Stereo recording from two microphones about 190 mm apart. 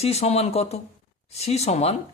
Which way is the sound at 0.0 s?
35° left (ahead or behind).